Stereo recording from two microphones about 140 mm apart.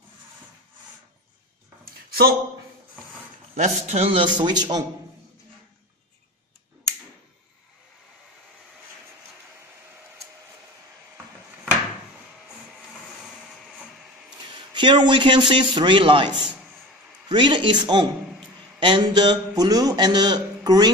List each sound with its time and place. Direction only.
3.5 s a man's voice: 55° right (ahead or behind); by 4.8 s 30° right (ahead or behind)
14.4 s a man's voice: 35° right (ahead or behind)